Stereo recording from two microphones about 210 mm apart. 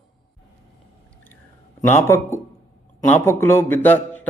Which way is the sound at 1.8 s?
10° left (ahead or behind).